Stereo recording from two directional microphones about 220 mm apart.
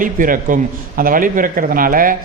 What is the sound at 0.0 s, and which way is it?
A man's voice, 35° right (ahead or behind).